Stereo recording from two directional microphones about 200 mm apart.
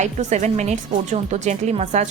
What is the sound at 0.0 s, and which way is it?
A woman's voice, 35° right (ahead or behind).